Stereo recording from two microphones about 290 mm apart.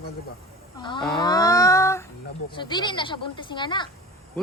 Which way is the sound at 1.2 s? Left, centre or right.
Centre.